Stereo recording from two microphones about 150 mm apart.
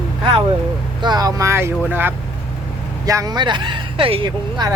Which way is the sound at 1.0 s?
25° right (ahead or behind).